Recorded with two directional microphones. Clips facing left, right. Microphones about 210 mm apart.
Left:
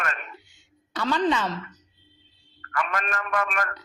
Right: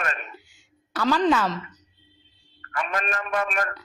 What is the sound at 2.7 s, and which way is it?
A man's voice, 25° right (ahead or behind).